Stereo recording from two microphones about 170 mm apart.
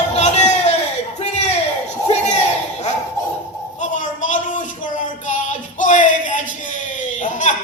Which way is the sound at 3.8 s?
50° left (ahead or behind).